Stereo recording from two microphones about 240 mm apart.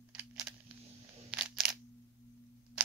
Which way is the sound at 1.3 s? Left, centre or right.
Centre.